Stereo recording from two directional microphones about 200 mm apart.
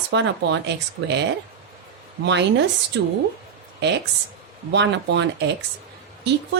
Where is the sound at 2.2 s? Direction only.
60° right (ahead or behind).